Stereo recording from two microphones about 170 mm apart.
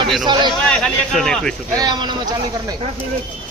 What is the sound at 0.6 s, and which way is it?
Speech, 5° left (ahead or behind).